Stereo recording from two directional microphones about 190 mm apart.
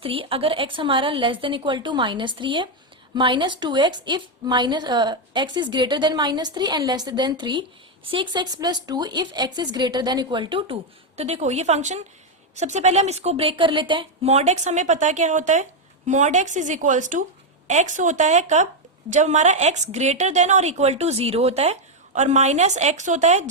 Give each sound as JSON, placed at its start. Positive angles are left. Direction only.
{"t": 0.0, "sound": "a woman's voice", "side_deg": -30}